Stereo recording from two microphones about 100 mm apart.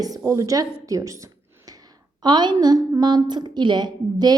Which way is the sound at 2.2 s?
45° right (ahead or behind).